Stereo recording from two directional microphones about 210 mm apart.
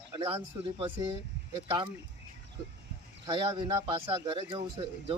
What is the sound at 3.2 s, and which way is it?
Speech, 20° right (ahead or behind).